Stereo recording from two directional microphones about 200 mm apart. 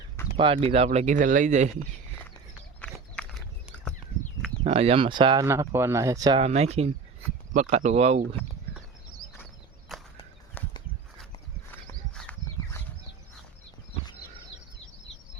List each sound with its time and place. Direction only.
0.3 s speech: 25° right (ahead or behind)
2.8 s walk: 5° left (ahead or behind)
4.6 s speech: 30° right (ahead or behind)
6.4 s speech: 30° right (ahead or behind)
9.9 s walk: centre (ahead or behind)
10.6 s a sound: 10° left (ahead or behind)
12.1 s a sound: 5° left (ahead or behind)